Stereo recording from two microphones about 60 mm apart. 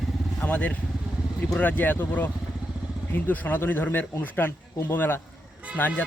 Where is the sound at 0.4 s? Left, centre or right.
Left.